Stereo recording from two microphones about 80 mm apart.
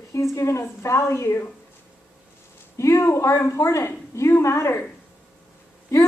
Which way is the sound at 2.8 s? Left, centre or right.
Left.